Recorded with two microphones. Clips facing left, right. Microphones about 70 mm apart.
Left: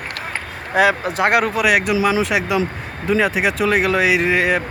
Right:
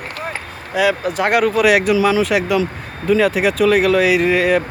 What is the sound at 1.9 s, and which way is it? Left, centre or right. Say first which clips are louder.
Speech: right 2 dB; centre.